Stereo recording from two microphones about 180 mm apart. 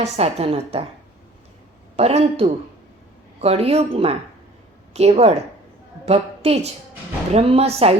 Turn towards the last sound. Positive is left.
turn(degrees=-35)  # may be behind; listen again after turning